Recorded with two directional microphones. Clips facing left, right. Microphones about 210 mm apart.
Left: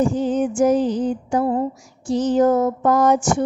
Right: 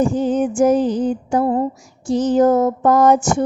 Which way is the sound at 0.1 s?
50° right (ahead or behind).